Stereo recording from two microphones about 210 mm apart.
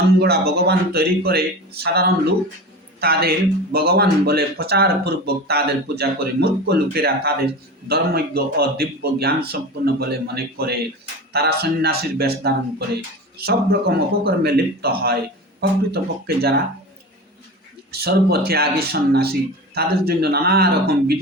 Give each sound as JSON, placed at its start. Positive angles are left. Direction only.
{"t": 0.2, "sound": "speech", "side_deg": -50}
{"t": 17.9, "sound": "speech", "side_deg": -50}